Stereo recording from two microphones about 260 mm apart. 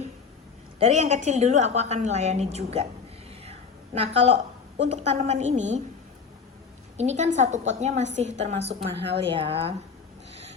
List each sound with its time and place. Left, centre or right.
0.8 s a woman's voice: right
3.9 s a woman's voice: right
6.9 s a woman's voice: right